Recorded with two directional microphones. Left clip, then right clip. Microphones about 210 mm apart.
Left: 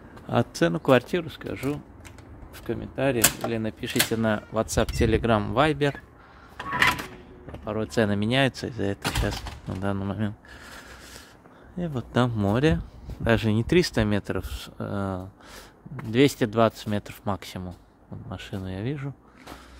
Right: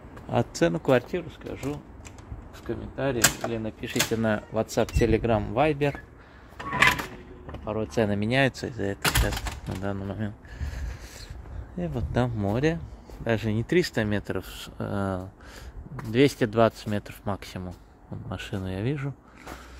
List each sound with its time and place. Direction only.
0.3 s speech: 20° left (ahead or behind)
1.0 s speech: 40° left (ahead or behind)
3.2 s speech: 30° left (ahead or behind)
4.1 s speech: 10° left (ahead or behind)
7.5 s speech: 20° left (ahead or behind)
11.8 s speech: 15° left (ahead or behind)
16.1 s speech: 15° left (ahead or behind)
18.3 s speech: centre (ahead or behind)